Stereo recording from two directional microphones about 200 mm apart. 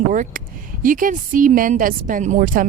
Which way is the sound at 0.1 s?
40° right (ahead or behind).